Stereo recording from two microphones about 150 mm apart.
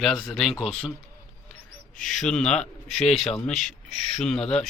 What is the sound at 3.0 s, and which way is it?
Speech, 40° left (ahead or behind).